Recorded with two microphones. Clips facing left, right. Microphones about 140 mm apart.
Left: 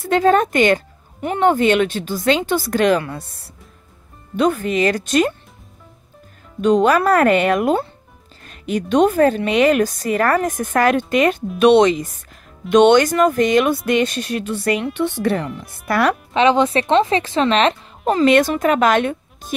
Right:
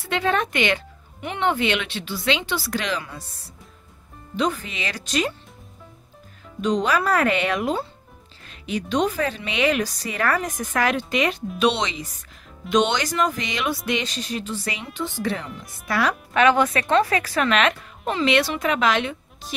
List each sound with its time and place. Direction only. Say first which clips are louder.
0.0 s speech: left 8 dB; 40° left (ahead or behind)
6.6 s speech: left 7 dB; 55° left (ahead or behind)
16.3 s speech: left 3 dB; 25° left (ahead or behind); by 19.5 s 50° left (ahead or behind)